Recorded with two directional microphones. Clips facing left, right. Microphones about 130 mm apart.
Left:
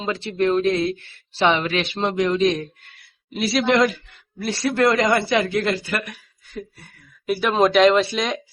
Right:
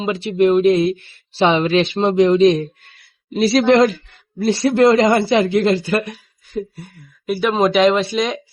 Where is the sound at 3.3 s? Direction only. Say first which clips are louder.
Right 6 dB; 35° right (ahead or behind).